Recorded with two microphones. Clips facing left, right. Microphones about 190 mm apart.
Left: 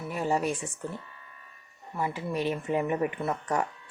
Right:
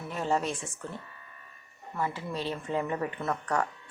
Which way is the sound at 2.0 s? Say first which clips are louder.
Left 3 dB; 15° left (ahead or behind).